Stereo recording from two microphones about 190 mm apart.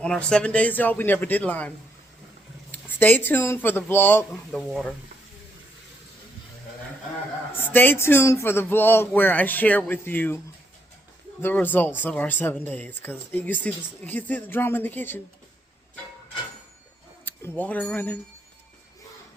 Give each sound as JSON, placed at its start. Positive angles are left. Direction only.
{"t": 0.0, "sound": "speech", "side_deg": 5}
{"t": 2.7, "sound": "speech", "side_deg": 10}
{"t": 7.7, "sound": "speech", "side_deg": 10}
{"t": 11.4, "sound": "speech", "side_deg": 10}
{"t": 17.2, "sound": "speech", "side_deg": 10}